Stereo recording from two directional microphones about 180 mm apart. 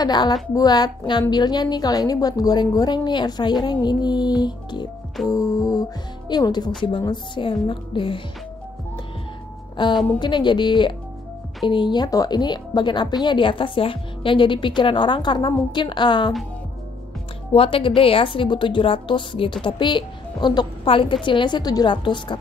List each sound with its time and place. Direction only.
0.0 s a woman's voice: 25° left (ahead or behind)
9.8 s a woman's voice: 25° left (ahead or behind)
17.6 s a woman's voice: 30° left (ahead or behind)